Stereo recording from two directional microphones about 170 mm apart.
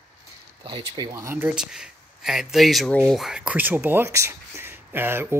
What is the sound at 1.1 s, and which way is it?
Speech, 15° right (ahead or behind).